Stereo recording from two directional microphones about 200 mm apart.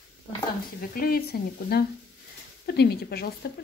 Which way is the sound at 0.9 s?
50° left (ahead or behind).